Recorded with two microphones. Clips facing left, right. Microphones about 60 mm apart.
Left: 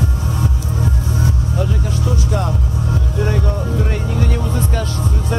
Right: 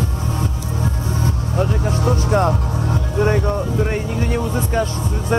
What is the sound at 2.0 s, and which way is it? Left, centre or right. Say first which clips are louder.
Music: right 5 dB; right.